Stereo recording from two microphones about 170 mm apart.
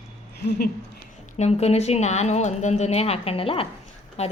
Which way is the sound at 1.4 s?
40° left (ahead or behind).